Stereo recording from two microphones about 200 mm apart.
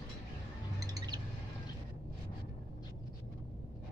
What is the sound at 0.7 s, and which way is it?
Bird, 20° right (ahead or behind).